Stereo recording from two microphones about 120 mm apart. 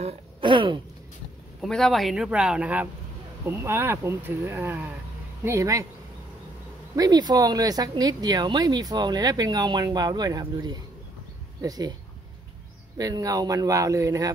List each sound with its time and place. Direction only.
0.4 s throat clearing: 40° right (ahead or behind)
1.6 s speech: 5° left (ahead or behind); by 5.9 s 25° right (ahead or behind)
7.0 s speech: 35° right (ahead or behind)
12.9 s speech: 30° right (ahead or behind)